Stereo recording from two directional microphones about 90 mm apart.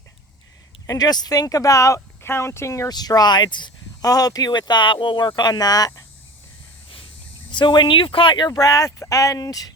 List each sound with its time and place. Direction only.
0.9 s speech: 45° left (ahead or behind)
2.9 s speech: 45° left (ahead or behind)
7.5 s speech: 60° left (ahead or behind)
8.4 s speech: 40° left (ahead or behind)